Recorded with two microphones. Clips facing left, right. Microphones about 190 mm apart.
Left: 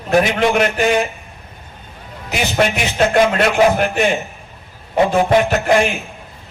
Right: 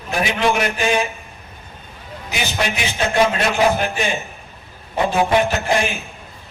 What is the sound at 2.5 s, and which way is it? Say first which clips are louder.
A man's voice: left 7 dB; 55° left (ahead or behind).